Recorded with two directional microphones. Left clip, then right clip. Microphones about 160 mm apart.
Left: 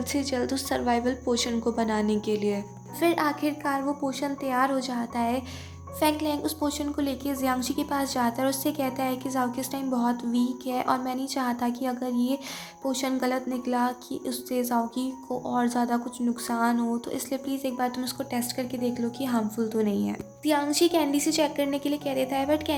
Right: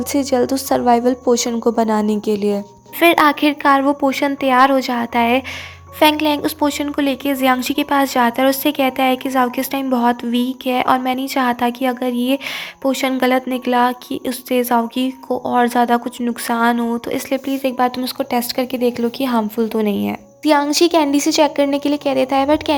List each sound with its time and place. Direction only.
0.0 s a woman's voice: 40° right (ahead or behind)